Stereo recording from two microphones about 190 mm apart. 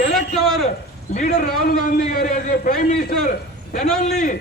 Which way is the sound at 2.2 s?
45° left (ahead or behind).